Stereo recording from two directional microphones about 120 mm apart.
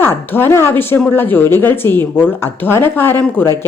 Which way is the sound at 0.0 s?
20° left (ahead or behind).